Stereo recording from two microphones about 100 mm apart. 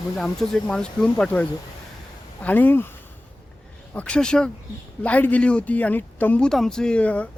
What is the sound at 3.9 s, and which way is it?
Speech, 10° left (ahead or behind).